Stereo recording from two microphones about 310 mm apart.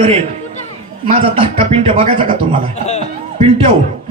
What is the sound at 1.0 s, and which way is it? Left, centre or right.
A man's voice, centre.